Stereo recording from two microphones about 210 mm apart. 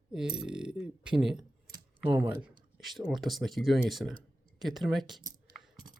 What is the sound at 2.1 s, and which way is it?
Speech, 10° right (ahead or behind).